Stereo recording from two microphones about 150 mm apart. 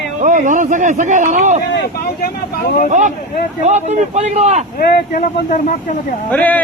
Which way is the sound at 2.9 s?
55° right (ahead or behind).